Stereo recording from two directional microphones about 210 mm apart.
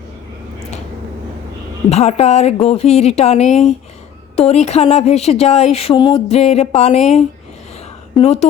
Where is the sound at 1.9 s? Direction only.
30° left (ahead or behind).